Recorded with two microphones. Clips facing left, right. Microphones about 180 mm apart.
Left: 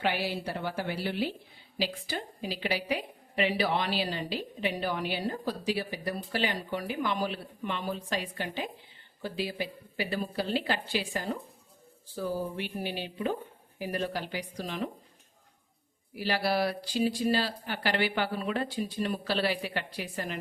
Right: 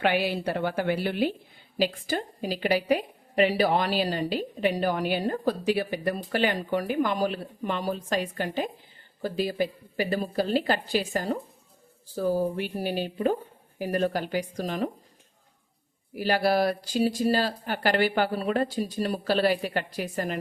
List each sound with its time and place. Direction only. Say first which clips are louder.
0.0 s a woman's voice: right 6 dB; 60° right (ahead or behind); by 14.8 s 45° right (ahead or behind)
16.1 s a woman's voice: right 5 dB; 45° right (ahead or behind)